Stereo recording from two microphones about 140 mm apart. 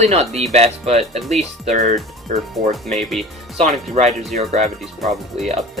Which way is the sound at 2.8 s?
Centre (ahead or behind).